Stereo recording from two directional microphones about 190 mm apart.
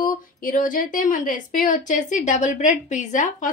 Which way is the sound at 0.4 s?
45° left (ahead or behind).